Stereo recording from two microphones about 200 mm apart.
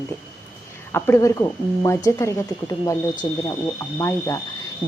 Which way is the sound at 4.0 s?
15° left (ahead or behind).